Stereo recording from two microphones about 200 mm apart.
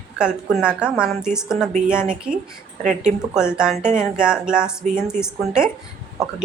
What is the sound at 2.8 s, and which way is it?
Speech, 40° right (ahead or behind).